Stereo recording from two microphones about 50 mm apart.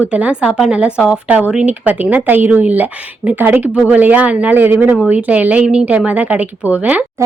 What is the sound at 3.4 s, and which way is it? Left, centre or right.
Speech, right.